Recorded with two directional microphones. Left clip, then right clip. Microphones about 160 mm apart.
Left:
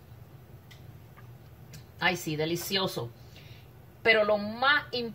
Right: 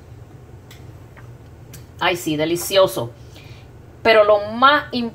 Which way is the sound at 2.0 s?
30° right (ahead or behind).